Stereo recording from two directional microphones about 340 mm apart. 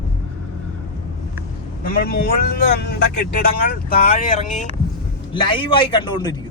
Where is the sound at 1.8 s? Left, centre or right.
Left.